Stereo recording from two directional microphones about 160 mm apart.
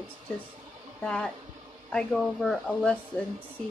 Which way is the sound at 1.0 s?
5° left (ahead or behind).